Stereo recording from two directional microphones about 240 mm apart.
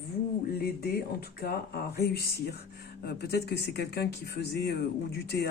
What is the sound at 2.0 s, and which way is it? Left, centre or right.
Speech, left.